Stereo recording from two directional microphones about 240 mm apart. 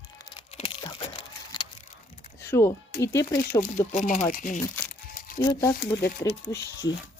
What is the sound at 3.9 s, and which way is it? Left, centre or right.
Speech, left.